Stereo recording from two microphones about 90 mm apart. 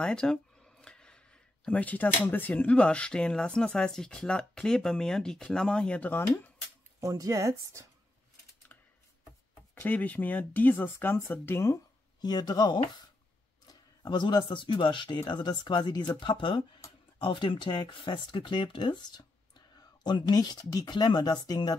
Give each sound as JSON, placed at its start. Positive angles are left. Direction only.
{"t": 0.0, "sound": "speech", "side_deg": 10}
{"t": 7.0, "sound": "speech", "side_deg": -35}
{"t": 9.8, "sound": "speech", "side_deg": 20}
{"t": 12.2, "sound": "speech", "side_deg": 50}